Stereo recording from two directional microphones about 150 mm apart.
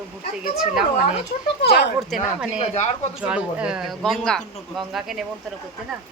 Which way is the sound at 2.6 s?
45° left (ahead or behind).